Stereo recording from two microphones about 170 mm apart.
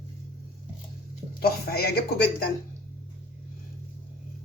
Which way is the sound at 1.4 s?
65° left (ahead or behind).